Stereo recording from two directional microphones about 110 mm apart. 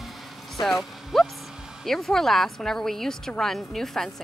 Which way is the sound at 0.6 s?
40° left (ahead or behind).